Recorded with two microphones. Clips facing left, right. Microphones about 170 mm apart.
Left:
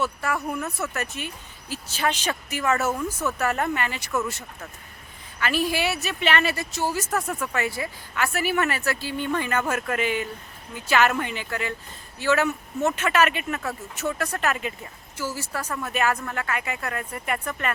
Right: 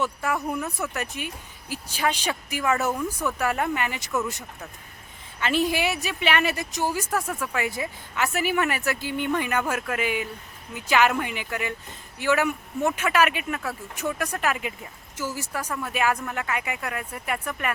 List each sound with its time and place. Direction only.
0.0 s speech: 15° right (ahead or behind)
5.4 s speech: 20° right (ahead or behind)
7.3 s speech: 10° left (ahead or behind)
7.5 s speech: 15° right (ahead or behind)